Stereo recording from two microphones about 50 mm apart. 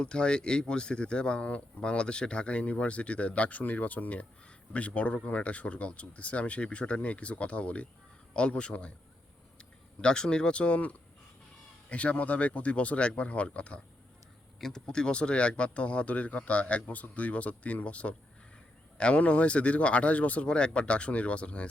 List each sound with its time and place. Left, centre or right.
0.0 s speech: centre